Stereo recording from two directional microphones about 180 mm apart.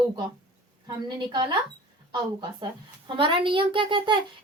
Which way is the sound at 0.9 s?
25° right (ahead or behind).